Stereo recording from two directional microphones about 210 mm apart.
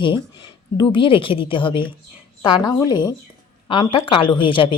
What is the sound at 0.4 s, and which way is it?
Speech, 20° left (ahead or behind).